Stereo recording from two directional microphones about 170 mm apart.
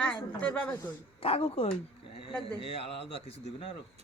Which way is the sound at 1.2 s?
35° left (ahead or behind).